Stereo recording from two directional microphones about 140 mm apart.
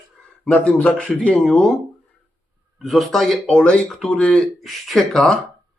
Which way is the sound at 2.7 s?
Centre (ahead or behind).